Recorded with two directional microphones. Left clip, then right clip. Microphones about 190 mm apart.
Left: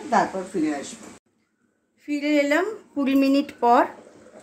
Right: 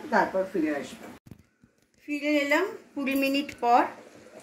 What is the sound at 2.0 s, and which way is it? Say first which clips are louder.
Speech: left 4 dB; 60° left (ahead or behind).